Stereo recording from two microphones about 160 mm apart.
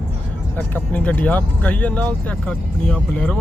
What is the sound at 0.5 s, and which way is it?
Speech, 10° left (ahead or behind).